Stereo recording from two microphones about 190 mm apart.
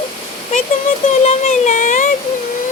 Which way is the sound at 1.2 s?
40° left (ahead or behind).